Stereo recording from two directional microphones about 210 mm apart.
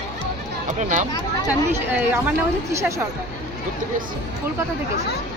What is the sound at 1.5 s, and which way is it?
Speech, 10° right (ahead or behind).